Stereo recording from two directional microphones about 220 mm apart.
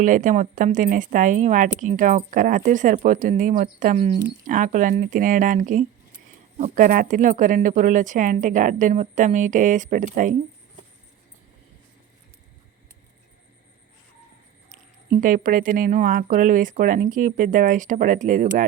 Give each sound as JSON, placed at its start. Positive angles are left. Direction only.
{"t": 0.0, "sound": "speech", "side_deg": -35}
{"t": 15.2, "sound": "speech", "side_deg": -40}